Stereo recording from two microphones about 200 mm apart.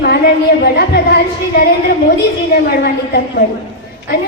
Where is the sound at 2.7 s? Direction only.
50° left (ahead or behind).